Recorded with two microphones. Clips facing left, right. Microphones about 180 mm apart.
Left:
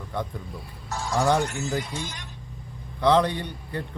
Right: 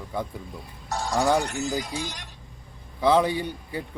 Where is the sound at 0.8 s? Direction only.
35° right (ahead or behind).